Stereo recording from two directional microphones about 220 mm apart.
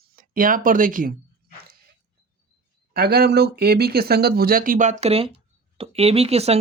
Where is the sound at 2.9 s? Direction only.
45° right (ahead or behind).